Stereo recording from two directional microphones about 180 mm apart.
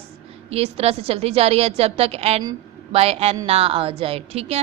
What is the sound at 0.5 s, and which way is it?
A woman's voice, 35° right (ahead or behind).